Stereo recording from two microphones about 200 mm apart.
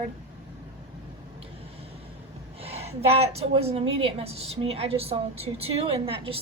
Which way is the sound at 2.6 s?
30° right (ahead or behind).